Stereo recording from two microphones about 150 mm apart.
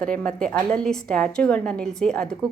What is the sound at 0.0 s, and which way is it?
A woman's voice, 5° left (ahead or behind).